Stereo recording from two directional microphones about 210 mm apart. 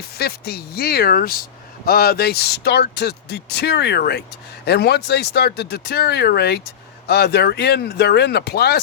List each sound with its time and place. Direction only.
0.2 s speech: 50° left (ahead or behind)